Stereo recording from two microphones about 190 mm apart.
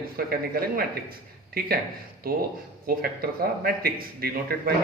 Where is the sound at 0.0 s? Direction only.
55° right (ahead or behind).